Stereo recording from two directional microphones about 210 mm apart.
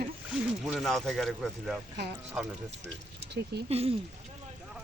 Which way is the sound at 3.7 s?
30° right (ahead or behind).